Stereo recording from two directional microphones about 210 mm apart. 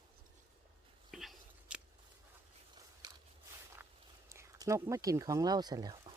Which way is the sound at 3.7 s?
10° right (ahead or behind).